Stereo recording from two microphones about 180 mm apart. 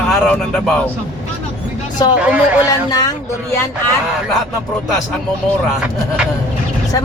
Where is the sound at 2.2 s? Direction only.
10° right (ahead or behind).